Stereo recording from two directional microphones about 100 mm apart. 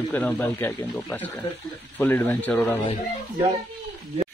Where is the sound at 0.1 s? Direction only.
20° left (ahead or behind).